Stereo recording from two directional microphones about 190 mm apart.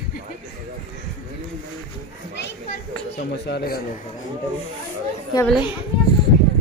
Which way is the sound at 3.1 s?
60° left (ahead or behind).